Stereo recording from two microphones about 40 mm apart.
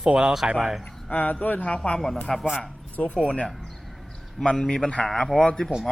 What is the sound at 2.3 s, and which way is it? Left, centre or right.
Speech, centre.